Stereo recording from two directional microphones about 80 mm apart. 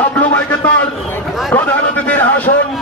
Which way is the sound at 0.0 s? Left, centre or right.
Centre.